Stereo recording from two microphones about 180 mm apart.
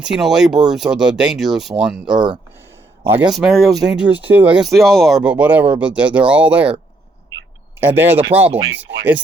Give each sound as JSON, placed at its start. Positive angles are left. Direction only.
{"t": 0.2, "sound": "speech", "side_deg": -5}
{"t": 7.8, "sound": "speech", "side_deg": -10}
{"t": 8.5, "sound": "speech", "side_deg": -75}